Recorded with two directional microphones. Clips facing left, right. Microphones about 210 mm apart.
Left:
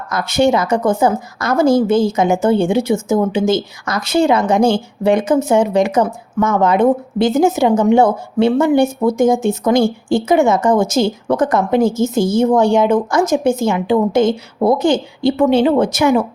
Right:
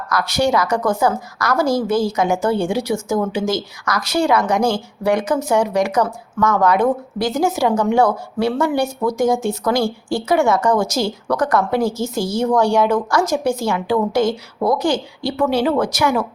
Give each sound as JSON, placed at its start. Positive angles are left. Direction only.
{"t": 0.1, "sound": "speech", "side_deg": 25}